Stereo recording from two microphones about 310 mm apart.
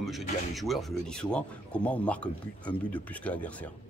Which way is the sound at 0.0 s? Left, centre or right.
Centre.